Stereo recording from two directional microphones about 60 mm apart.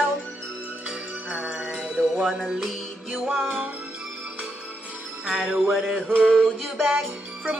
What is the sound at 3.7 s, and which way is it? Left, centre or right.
Music, right.